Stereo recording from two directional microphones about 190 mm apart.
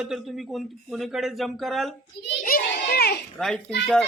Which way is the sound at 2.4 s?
50° left (ahead or behind).